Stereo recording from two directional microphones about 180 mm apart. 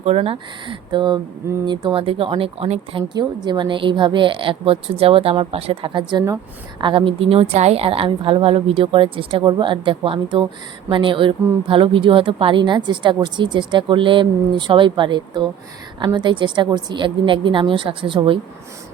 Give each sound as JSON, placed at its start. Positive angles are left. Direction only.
{"t": 0.0, "sound": "a woman's voice", "side_deg": -35}
{"t": 3.2, "sound": "a woman's voice", "side_deg": -25}